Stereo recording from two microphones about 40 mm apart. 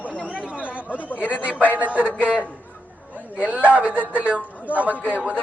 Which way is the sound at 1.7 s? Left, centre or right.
Right.